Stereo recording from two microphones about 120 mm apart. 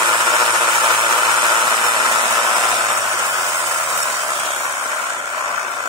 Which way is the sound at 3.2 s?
20° right (ahead or behind).